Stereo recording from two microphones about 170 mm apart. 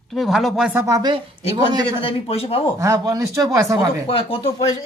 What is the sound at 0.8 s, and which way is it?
Speech, 25° right (ahead or behind).